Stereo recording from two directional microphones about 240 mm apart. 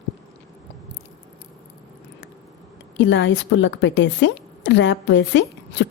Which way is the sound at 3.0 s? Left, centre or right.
Left.